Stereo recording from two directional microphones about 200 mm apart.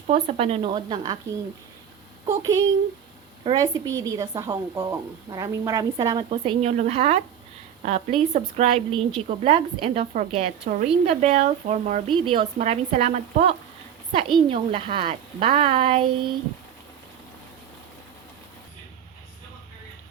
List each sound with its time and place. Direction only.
0.1 s a woman's voice: 30° right (ahead or behind)
2.2 s a woman's voice: 15° right (ahead or behind)
6.3 s a woman's voice: 30° right (ahead or behind)
12.2 s a woman's voice: 25° right (ahead or behind)
12.5 s a woman's voice: 35° right (ahead or behind)
14.1 s a woman's voice: 25° right (ahead or behind)